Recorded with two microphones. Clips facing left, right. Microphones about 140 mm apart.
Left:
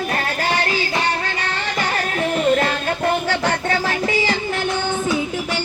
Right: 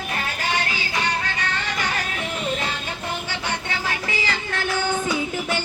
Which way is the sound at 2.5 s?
60° left (ahead or behind).